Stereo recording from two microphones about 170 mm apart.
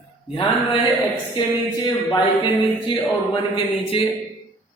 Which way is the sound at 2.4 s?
30° left (ahead or behind).